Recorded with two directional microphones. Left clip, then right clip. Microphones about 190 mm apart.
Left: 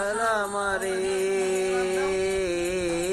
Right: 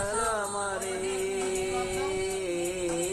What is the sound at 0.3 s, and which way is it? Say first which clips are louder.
Music: left 5 dB; 20° left (ahead or behind).